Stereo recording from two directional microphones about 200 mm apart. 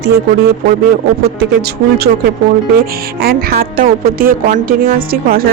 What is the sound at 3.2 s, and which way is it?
A woman's voice, 50° right (ahead or behind).